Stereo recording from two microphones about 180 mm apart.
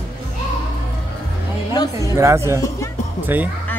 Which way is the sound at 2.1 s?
15° right (ahead or behind).